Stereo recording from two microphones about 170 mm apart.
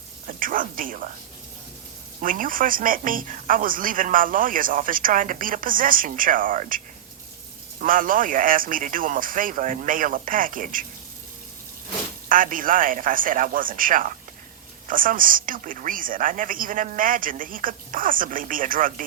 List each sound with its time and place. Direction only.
0.3 s speech: 55° right (ahead or behind)
2.2 s speech: 55° right (ahead or behind)
12.3 s speech: 55° right (ahead or behind)